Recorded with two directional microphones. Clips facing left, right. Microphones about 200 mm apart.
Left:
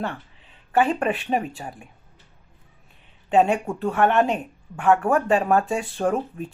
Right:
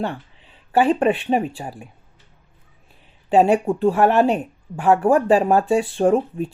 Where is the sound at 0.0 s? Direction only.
30° right (ahead or behind).